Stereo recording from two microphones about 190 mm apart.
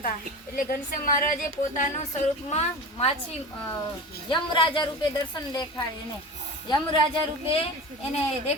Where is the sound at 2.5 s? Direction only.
35° left (ahead or behind).